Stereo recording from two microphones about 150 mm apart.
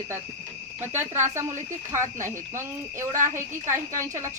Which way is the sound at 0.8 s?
15° right (ahead or behind).